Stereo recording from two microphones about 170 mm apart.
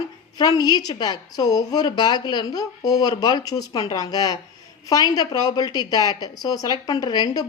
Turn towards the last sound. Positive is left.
turn(degrees=25)  # may be behind; listen again after turning